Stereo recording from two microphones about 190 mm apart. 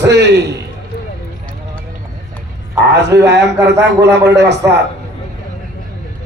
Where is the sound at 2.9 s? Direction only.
65° right (ahead or behind).